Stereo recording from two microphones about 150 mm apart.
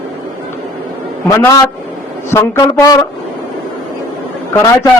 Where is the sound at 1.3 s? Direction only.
20° left (ahead or behind).